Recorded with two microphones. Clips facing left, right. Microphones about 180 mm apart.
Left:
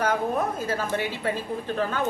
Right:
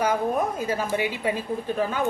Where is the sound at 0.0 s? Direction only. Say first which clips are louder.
Right 1 dB; 10° right (ahead or behind).